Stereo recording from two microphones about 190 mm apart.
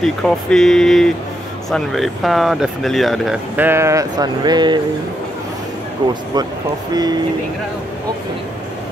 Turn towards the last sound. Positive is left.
turn(degrees=-20)  # may be behind; listen again after turning